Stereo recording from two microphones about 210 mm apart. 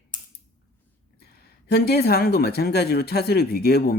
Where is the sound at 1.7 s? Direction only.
50° left (ahead or behind).